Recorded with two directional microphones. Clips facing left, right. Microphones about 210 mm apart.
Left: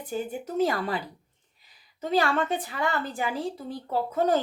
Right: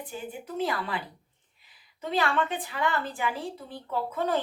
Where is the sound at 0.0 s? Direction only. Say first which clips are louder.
Left 6 dB; 45° left (ahead or behind).